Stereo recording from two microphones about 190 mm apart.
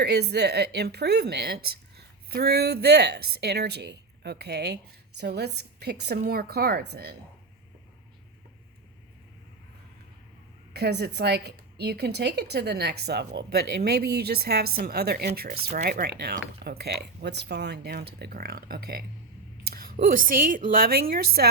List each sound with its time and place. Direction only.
0.0 s a woman's voice: 60° right (ahead or behind)
10.8 s a woman's voice: 60° right (ahead or behind)
15.4 s speech: 40° right (ahead or behind)
15.8 s a woman's voice: 55° right (ahead or behind)